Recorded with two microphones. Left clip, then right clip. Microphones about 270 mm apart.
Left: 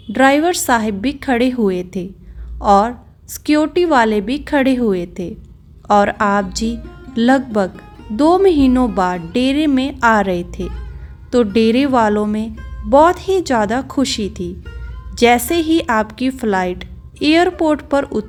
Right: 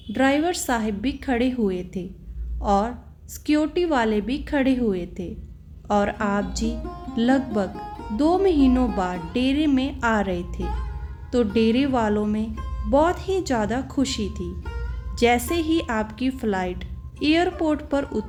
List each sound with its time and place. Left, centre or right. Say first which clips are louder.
0.1 s a woman's voice: left 9 dB; left